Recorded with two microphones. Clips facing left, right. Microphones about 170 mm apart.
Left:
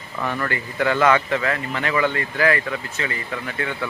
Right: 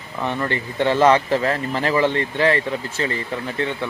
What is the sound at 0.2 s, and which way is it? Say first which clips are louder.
Speech: right 2 dB; 20° right (ahead or behind).